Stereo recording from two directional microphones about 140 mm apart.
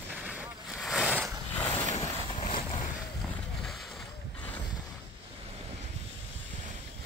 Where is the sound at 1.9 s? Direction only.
55° left (ahead or behind).